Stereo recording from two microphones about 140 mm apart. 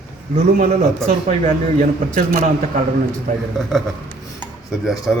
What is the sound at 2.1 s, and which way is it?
Speech, 70° right (ahead or behind).